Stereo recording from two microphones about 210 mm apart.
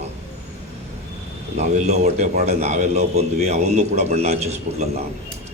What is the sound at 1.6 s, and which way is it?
A man's voice, 30° right (ahead or behind).